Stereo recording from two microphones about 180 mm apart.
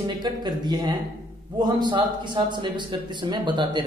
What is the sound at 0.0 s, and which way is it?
A man's voice, 25° right (ahead or behind).